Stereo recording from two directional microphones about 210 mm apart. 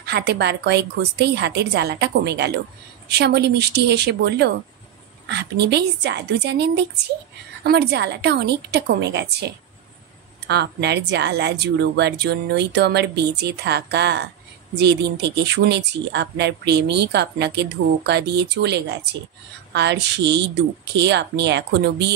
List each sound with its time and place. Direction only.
0.0 s speech: 50° right (ahead or behind)